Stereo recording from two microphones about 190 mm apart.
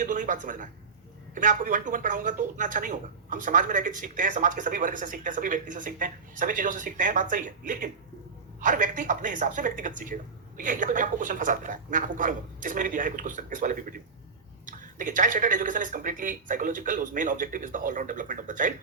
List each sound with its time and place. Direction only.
0.0 s speech: 45° right (ahead or behind)